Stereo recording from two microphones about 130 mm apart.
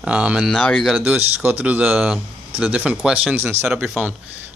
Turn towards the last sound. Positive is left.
turn(degrees=-10)  # may be behind; listen again after turning